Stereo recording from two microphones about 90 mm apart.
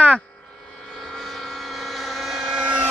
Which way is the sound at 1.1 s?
5° left (ahead or behind).